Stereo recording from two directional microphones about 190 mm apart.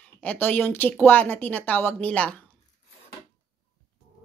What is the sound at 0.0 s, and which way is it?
Speech, 10° left (ahead or behind).